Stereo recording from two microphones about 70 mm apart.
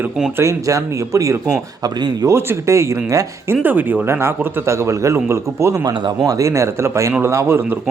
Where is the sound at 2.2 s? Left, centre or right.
Right.